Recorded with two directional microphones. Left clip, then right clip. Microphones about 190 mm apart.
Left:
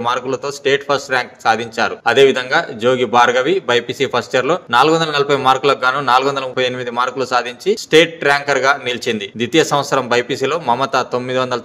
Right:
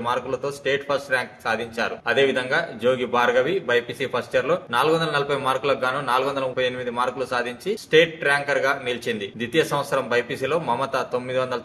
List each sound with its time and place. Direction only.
0.0 s a man's voice: 50° left (ahead or behind)